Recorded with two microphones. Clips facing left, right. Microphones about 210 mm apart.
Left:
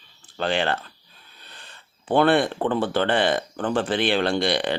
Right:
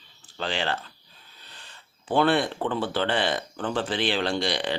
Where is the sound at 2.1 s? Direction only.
55° left (ahead or behind).